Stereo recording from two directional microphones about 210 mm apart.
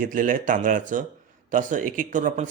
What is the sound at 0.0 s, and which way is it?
Speech, 40° right (ahead or behind).